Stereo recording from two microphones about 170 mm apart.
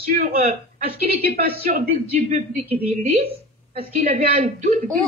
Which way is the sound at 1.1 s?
60° right (ahead or behind).